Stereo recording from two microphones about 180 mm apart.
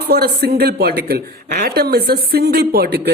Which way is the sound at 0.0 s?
60° right (ahead or behind).